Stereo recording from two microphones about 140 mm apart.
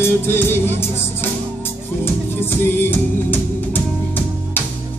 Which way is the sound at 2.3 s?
15° left (ahead or behind).